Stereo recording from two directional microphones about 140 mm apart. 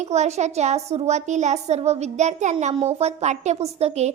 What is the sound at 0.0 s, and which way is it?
A woman's voice, 55° right (ahead or behind).